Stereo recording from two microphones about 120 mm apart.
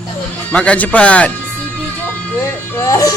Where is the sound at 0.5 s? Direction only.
10° left (ahead or behind).